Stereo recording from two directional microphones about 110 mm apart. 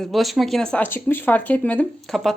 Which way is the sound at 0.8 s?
15° left (ahead or behind).